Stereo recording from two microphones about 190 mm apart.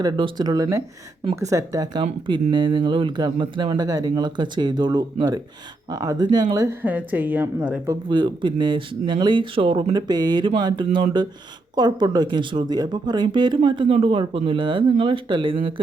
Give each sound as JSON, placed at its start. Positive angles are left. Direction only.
{"t": 0.0, "sound": "speech", "side_deg": -20}
{"t": 8.1, "sound": "speech", "side_deg": -25}